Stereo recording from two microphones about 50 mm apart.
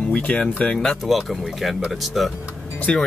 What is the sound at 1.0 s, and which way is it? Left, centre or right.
Speech, centre.